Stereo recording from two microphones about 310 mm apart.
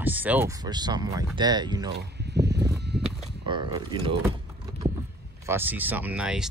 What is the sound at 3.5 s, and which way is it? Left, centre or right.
Speech, centre.